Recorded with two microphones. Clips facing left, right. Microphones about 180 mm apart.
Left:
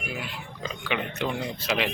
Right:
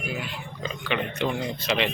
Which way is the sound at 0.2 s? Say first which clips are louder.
Right 2 dB; 5° left (ahead or behind).